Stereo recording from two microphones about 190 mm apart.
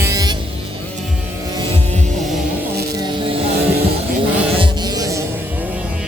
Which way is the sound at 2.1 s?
Centre (ahead or behind).